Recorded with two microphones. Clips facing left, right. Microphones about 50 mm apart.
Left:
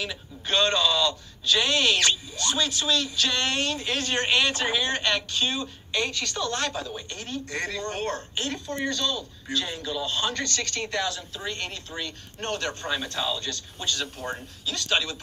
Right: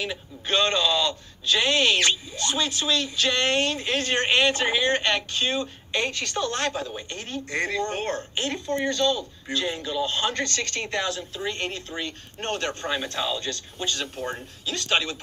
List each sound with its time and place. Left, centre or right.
0.0 s a man's voice: right